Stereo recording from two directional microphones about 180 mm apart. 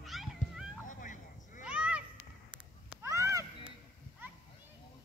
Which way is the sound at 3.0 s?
15° right (ahead or behind).